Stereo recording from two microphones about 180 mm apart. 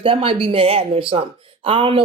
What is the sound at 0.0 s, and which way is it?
Speech, 30° right (ahead or behind).